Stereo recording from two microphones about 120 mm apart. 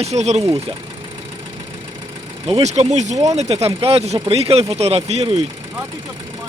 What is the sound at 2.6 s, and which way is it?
Speech, 70° right (ahead or behind).